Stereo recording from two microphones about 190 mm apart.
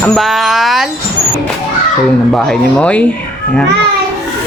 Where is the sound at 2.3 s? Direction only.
5° left (ahead or behind).